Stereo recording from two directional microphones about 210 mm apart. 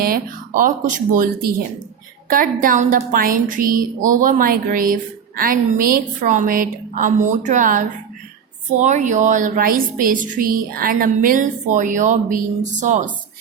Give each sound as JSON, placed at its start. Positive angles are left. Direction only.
{"t": 0.0, "sound": "speech", "side_deg": -45}